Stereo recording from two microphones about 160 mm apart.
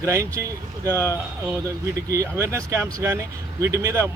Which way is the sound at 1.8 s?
20° right (ahead or behind).